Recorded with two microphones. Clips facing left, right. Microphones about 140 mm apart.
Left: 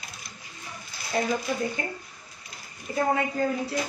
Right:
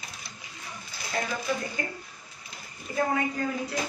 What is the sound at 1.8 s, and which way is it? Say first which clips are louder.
Speech: left 1 dB; 25° left (ahead or behind).